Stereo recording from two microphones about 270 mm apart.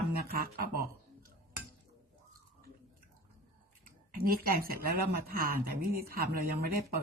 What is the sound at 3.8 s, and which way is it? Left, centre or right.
Speech, right.